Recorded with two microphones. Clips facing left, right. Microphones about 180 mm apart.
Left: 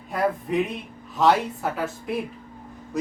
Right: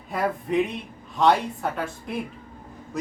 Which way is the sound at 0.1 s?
Centre (ahead or behind).